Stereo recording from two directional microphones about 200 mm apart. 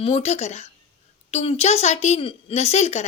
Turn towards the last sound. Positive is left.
turn(degrees=35)  # may be behind; listen again after turning